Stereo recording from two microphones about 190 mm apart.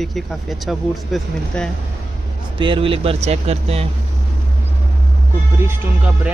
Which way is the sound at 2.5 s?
25° right (ahead or behind).